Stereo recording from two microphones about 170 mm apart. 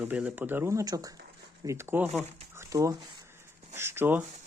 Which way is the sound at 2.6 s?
20° right (ahead or behind).